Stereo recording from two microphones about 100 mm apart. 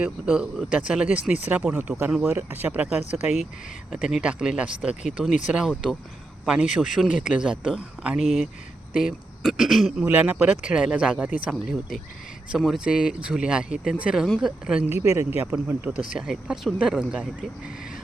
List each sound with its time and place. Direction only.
0.0 s speech: 10° right (ahead or behind)
5.6 s speech: 5° left (ahead or behind)
6.4 s speech: 10° right (ahead or behind)
10.1 s speech: 15° right (ahead or behind)
15.0 s speech: 30° right (ahead or behind)
15.5 s speech: 15° right (ahead or behind)